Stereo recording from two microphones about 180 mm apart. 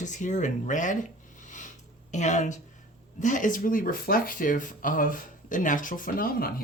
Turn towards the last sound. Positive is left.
turn(degrees=55)  # may be behind; listen again after turning